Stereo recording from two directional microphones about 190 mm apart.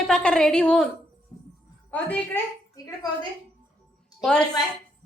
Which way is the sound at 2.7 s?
20° left (ahead or behind).